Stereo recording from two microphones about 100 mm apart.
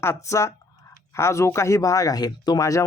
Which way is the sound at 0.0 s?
25° left (ahead or behind).